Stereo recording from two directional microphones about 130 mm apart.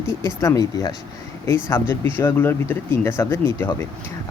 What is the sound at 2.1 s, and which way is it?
Speech, 15° left (ahead or behind).